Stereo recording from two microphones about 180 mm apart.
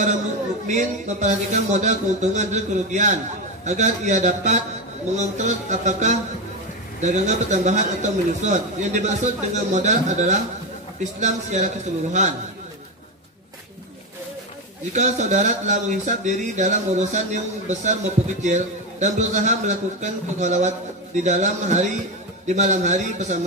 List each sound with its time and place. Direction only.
0.7 s speech: 40° right (ahead or behind)
14.9 s speech: 40° right (ahead or behind)